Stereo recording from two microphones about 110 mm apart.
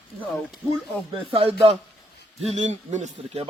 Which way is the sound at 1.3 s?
60° right (ahead or behind).